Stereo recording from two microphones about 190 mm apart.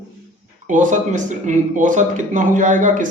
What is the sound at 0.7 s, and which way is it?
Speech, 40° right (ahead or behind).